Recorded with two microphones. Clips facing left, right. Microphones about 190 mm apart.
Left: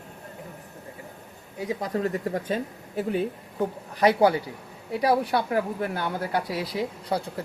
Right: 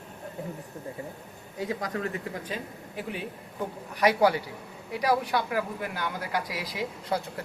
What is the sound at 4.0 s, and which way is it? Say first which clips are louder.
Speech: left 3 dB; 25° left (ahead or behind).